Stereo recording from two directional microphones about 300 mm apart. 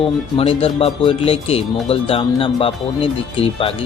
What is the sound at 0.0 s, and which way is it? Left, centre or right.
A man's voice, centre.